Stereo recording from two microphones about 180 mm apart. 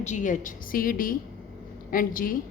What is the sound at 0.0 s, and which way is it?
A woman's voice, 45° left (ahead or behind).